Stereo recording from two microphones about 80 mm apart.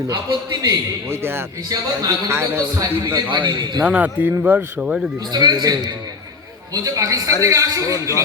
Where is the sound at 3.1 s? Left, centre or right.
Right.